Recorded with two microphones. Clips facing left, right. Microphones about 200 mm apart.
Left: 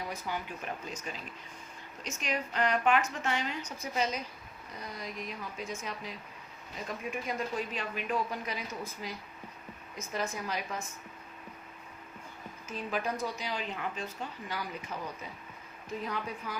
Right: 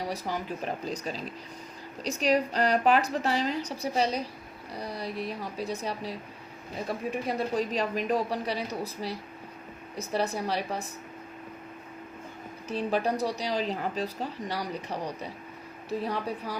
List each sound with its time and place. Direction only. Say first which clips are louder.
0.0 s speech: right 5 dB; 35° right (ahead or behind)
12.6 s speech: right 7 dB; 35° right (ahead or behind)